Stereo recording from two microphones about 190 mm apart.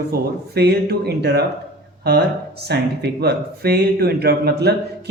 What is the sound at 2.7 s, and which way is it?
Speech, 60° right (ahead or behind).